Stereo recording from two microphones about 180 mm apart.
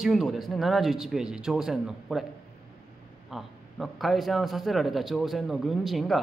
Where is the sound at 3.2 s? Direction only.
Centre (ahead or behind).